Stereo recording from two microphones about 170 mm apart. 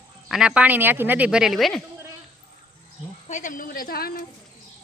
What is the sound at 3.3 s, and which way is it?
Speech, 45° left (ahead or behind).